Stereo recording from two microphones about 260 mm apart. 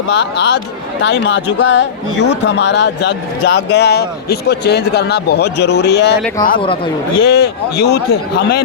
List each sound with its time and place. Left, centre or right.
0.1 s a man's voice: left
7.3 s a man's voice: left